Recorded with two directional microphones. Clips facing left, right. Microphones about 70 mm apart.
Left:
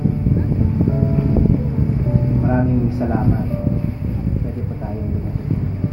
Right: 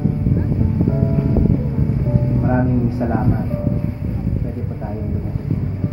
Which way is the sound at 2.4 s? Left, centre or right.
Right.